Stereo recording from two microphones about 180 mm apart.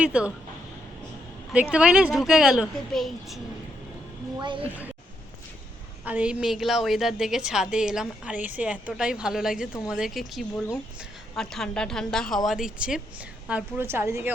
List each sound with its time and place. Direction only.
0.0 s a woman's voice: 5° right (ahead or behind)
1.7 s a woman's voice: 5° right (ahead or behind)
4.4 s a woman's voice: 25° right (ahead or behind)
6.1 s a woman's voice: 5° right (ahead or behind)